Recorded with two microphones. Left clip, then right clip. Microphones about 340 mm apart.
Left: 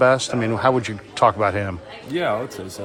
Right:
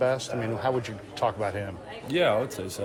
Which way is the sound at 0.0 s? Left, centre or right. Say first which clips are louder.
Left 9 dB; left.